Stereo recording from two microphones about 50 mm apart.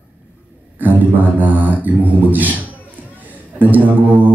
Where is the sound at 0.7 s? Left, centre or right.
Right.